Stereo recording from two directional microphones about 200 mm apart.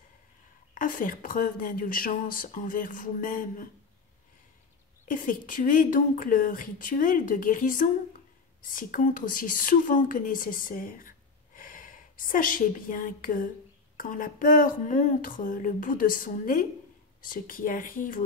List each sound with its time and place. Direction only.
0.7 s a woman's voice: 40° left (ahead or behind)
5.0 s a woman's voice: 45° left (ahead or behind)